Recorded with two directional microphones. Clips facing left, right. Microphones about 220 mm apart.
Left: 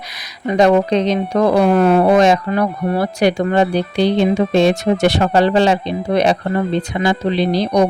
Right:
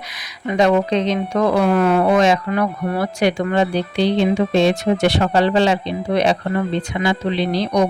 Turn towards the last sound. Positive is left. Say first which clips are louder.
# left 3 dB
turn(degrees=35)  # may be behind; listen again after turning